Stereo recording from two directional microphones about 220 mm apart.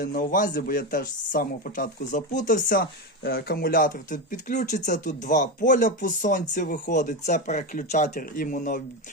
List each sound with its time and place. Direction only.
0.0 s speech: 40° left (ahead or behind)